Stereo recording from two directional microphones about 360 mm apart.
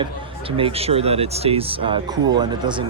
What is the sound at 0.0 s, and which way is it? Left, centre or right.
Speech, centre.